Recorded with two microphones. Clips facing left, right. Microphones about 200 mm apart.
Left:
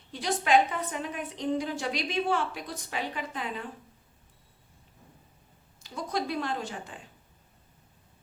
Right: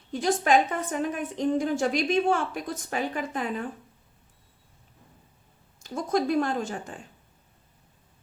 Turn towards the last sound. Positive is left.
turn(degrees=-45)  # may be behind; listen again after turning